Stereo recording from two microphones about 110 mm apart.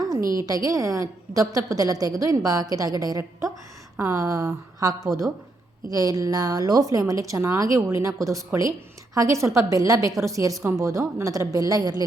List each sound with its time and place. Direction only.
0.0 s a woman's voice: 35° right (ahead or behind)